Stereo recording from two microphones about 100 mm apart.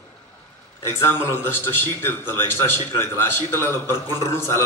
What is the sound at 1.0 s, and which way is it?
A man's voice, 25° left (ahead or behind).